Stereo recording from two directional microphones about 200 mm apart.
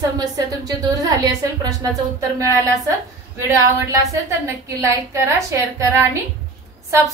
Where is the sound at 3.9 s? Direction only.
15° right (ahead or behind).